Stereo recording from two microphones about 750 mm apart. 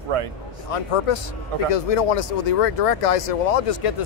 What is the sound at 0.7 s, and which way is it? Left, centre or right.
Speech, left.